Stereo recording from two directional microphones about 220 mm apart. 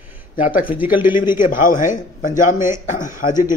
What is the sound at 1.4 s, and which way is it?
A man's voice, 40° left (ahead or behind).